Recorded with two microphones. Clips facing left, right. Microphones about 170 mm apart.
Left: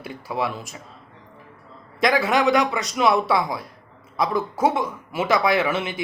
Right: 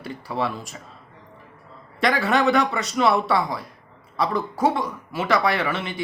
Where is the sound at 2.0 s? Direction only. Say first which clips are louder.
Left 1 dB; 15° left (ahead or behind).